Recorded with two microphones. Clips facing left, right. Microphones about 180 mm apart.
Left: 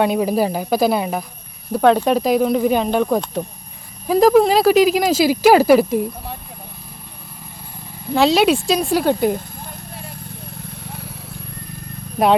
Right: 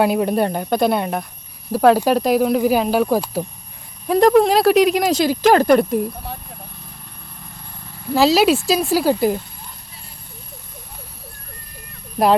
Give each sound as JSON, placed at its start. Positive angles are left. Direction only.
{"t": 0.0, "sound": "speech", "side_deg": 0}
{"t": 8.1, "sound": "speech", "side_deg": 0}
{"t": 9.6, "sound": "clip-clop", "side_deg": 55}